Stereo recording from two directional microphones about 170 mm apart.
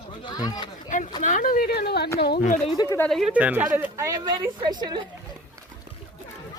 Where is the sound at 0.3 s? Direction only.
25° left (ahead or behind).